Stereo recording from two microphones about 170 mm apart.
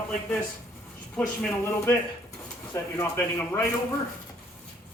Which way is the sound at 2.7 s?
15° left (ahead or behind).